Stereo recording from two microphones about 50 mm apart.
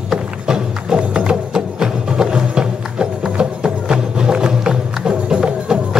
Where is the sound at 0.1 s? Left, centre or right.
Centre.